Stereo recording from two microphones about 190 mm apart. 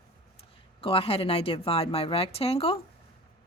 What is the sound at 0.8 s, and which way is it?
Speech, 30° left (ahead or behind).